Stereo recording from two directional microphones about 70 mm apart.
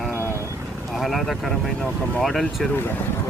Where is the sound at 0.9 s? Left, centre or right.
Centre.